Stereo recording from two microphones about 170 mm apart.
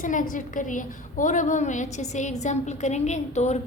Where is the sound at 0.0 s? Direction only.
50° left (ahead or behind).